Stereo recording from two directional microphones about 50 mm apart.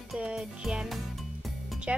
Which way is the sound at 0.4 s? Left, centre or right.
Centre.